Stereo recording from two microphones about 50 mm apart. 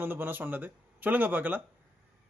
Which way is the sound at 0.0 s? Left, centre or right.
Right.